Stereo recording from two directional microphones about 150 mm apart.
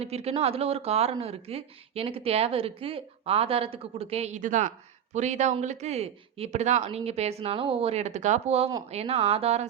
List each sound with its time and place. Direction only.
0.0 s a woman's voice: 45° right (ahead or behind)